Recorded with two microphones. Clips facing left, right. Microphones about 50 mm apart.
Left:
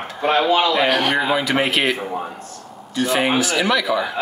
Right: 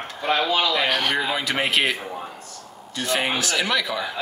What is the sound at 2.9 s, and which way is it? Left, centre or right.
Speech, centre.